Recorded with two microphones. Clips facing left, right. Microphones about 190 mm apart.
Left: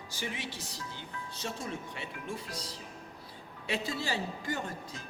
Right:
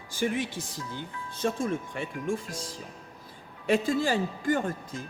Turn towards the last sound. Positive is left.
turn(degrees=-50)  # may be behind; listen again after turning